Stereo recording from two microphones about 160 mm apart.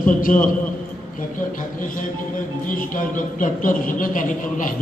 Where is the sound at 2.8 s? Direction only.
55° left (ahead or behind).